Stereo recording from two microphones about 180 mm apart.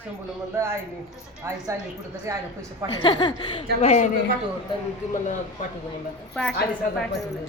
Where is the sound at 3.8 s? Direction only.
40° left (ahead or behind).